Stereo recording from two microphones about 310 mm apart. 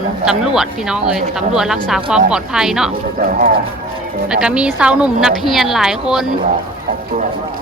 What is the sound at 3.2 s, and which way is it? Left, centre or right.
Speech, right.